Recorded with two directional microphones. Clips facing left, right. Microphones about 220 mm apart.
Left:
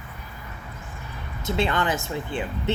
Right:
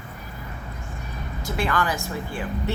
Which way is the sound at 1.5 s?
25° left (ahead or behind).